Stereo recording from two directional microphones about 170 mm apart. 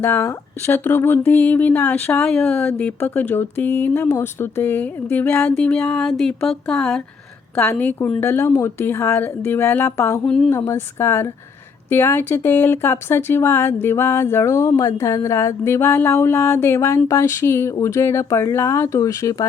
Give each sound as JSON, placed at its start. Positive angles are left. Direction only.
{"t": 0.0, "sound": "speech", "side_deg": 15}